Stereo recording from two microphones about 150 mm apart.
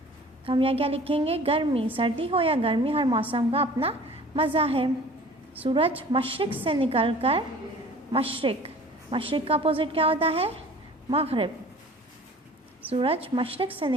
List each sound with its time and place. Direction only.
0.4 s a woman's voice: 40° right (ahead or behind)
12.9 s a woman's voice: 40° right (ahead or behind)